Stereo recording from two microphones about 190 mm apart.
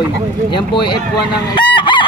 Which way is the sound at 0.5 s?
25° left (ahead or behind).